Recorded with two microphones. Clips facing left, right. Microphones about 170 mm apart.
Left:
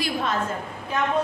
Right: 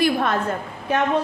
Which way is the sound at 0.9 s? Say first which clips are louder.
Right 5 dB; 70° right (ahead or behind).